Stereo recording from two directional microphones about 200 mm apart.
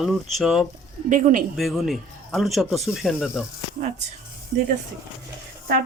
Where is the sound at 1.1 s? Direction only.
40° right (ahead or behind).